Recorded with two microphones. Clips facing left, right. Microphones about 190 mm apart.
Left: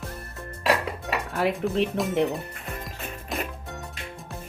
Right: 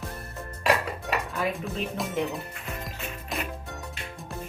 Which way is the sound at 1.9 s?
Centre (ahead or behind).